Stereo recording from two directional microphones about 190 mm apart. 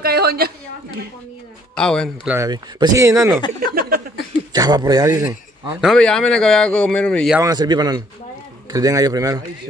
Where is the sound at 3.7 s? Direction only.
55° right (ahead or behind).